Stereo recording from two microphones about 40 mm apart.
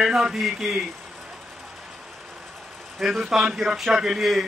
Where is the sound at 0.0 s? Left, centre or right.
Centre.